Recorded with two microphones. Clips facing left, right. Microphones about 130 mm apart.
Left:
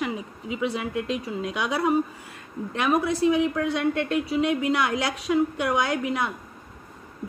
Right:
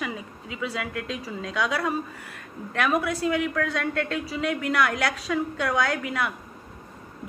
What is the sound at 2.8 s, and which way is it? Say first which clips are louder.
A woman's voice: left 4 dB; 25° left (ahead or behind).